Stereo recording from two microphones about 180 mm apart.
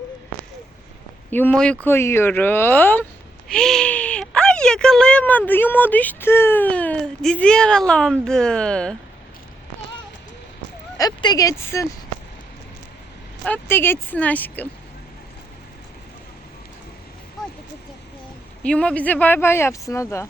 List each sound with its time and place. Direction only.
1.3 s speech: 10° left (ahead or behind)
10.9 s speech: 20° left (ahead or behind)
13.4 s speech: 10° left (ahead or behind)
18.6 s speech: 5° left (ahead or behind)